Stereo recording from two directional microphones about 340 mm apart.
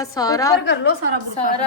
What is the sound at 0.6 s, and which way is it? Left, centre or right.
Speech, left.